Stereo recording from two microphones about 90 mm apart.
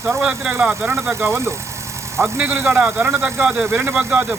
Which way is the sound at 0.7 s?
30° right (ahead or behind).